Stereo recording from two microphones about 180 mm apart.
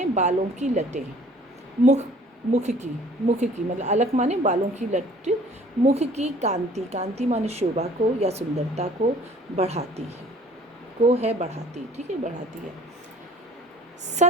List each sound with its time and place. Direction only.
0.0 s a woman's voice: 40° right (ahead or behind)
14.2 s a woman's voice: 40° right (ahead or behind)